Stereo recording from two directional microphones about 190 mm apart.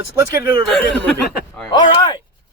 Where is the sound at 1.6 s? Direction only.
25° left (ahead or behind).